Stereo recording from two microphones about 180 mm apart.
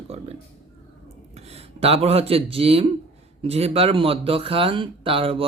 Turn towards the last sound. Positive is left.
turn(degrees=-30)  # may be behind; listen again after turning